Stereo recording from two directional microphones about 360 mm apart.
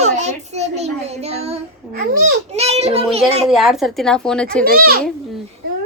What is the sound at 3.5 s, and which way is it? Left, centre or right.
Speech, centre.